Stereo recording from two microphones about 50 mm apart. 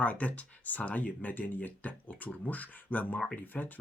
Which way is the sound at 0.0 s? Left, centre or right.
Left.